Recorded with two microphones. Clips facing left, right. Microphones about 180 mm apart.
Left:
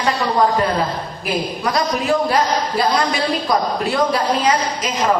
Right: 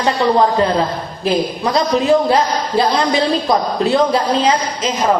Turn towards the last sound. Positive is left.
turn(degrees=-25)  # may be behind; listen again after turning